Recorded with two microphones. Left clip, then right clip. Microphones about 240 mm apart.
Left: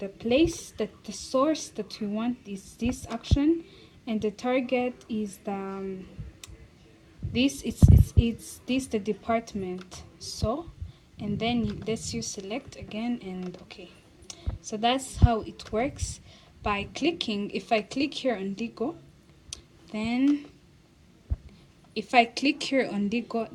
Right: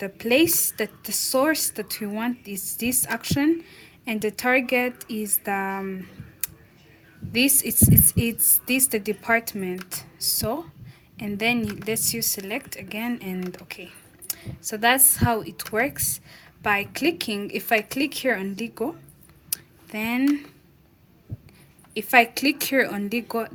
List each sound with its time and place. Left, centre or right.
0.0 s a woman's voice: right
7.3 s a woman's voice: right
19.5 s a sound: right
21.9 s a woman's voice: right